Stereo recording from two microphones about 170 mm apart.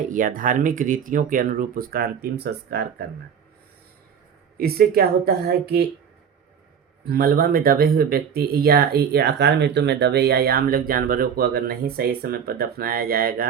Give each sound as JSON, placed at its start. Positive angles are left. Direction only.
{"t": 0.1, "sound": "speech", "side_deg": -50}
{"t": 4.5, "sound": "speech", "side_deg": -60}
{"t": 7.1, "sound": "speech", "side_deg": -65}